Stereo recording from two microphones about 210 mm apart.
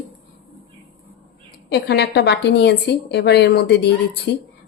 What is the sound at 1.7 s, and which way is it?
A woman's voice, 50° left (ahead or behind).